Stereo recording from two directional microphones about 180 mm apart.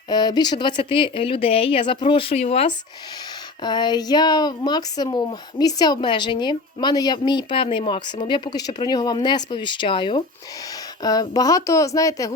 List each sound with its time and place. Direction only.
0.1 s speech: 20° left (ahead or behind)
3.6 s speech: 25° left (ahead or behind)